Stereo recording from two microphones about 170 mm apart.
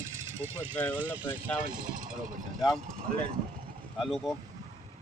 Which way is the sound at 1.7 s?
55° right (ahead or behind).